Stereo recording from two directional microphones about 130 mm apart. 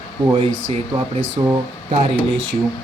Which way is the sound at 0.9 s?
40° right (ahead or behind).